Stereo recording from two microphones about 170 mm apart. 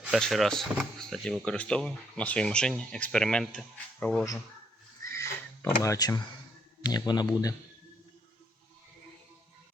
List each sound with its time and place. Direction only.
0.0 s speech: centre (ahead or behind)
5.1 s a sound: 15° left (ahead or behind)
6.8 s speech: 25° left (ahead or behind)